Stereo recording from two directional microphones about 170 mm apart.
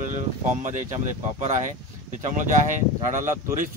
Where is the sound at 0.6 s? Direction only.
45° right (ahead or behind).